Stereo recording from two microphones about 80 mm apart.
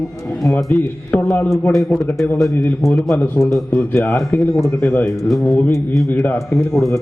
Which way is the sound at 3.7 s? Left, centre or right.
Centre.